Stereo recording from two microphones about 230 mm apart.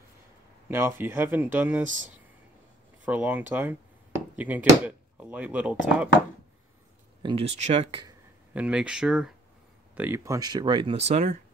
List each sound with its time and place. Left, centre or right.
0.7 s speech: centre
3.1 s speech: centre
7.2 s speech: right
8.5 s speech: centre; by 11.3 s right